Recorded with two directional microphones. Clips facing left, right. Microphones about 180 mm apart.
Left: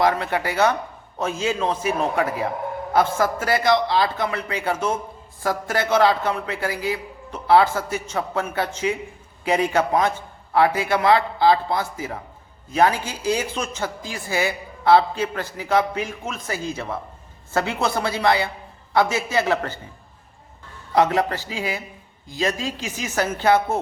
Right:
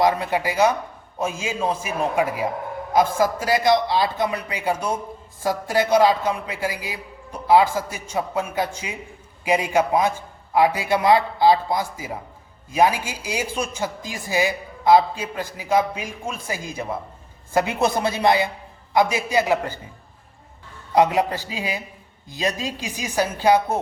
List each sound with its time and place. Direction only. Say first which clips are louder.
0.0 s a woman's voice: right 1 dB; 15° right (ahead or behind)
20.9 s a woman's voice: right 1 dB; 15° right (ahead or behind)